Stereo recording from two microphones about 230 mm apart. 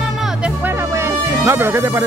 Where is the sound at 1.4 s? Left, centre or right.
Centre.